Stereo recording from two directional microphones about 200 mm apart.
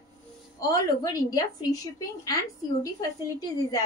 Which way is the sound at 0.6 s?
15° left (ahead or behind).